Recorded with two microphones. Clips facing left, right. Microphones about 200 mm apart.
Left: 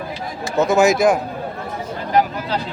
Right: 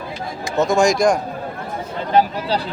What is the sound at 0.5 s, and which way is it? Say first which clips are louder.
Speech: left 1 dB; centre (ahead or behind).